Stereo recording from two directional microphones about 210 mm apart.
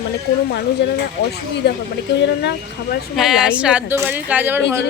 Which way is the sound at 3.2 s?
Centre (ahead or behind).